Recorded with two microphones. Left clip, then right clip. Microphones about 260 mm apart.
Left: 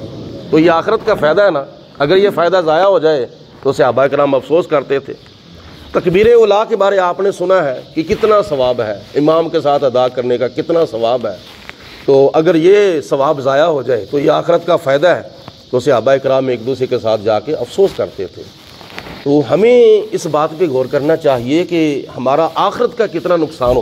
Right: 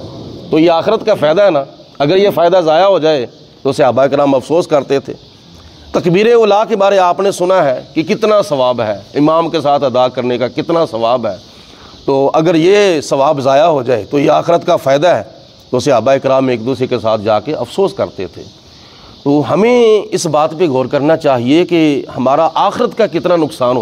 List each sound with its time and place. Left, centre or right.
0.5 s a man's voice: right
19.3 s a man's voice: right